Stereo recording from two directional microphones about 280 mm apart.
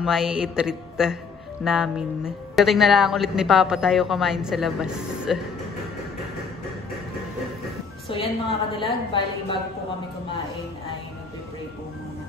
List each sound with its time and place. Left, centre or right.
0.0 s speech: centre
8.1 s a woman's voice: centre